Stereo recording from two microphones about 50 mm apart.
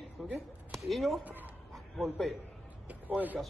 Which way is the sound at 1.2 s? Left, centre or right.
Right.